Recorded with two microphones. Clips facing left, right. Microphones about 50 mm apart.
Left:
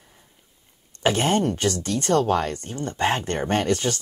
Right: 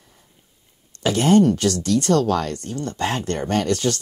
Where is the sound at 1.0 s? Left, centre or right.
Left.